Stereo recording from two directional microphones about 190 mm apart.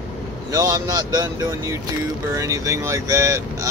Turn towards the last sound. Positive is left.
turn(degrees=-15)  # may be behind; listen again after turning